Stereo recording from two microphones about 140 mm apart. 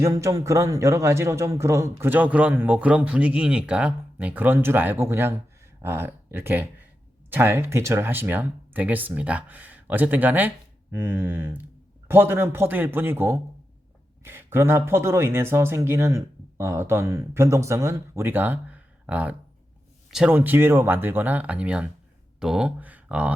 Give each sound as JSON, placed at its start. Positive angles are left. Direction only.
{"t": 0.0, "sound": "a man's voice", "side_deg": -20}
{"t": 20.3, "sound": "a man's voice", "side_deg": -15}